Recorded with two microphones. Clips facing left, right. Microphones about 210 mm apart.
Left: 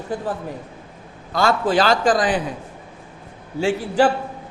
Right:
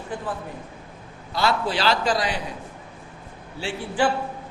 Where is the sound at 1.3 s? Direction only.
50° left (ahead or behind).